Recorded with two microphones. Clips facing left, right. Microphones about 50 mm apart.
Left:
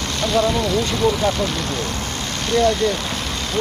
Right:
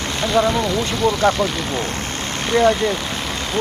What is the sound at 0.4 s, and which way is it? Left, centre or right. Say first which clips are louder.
Speech: right 2 dB; centre.